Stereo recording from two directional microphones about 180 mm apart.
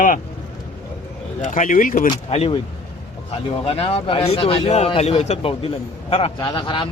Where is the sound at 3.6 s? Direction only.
30° left (ahead or behind).